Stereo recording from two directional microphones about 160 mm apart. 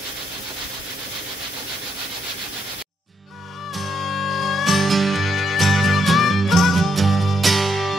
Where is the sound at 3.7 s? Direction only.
Centre (ahead or behind).